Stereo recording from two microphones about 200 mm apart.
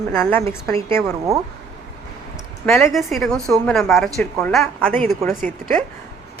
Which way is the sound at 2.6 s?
10° left (ahead or behind).